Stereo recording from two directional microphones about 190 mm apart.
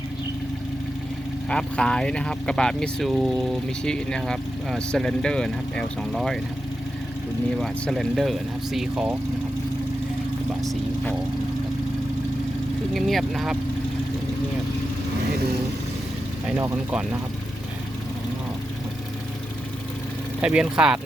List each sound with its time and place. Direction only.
1.5 s speech: 5° left (ahead or behind)
7.6 s speech: centre (ahead or behind)
10.6 s speech: centre (ahead or behind)
12.9 s speech: centre (ahead or behind)
16.5 s speech: 10° right (ahead or behind)
20.4 s speech: 5° right (ahead or behind)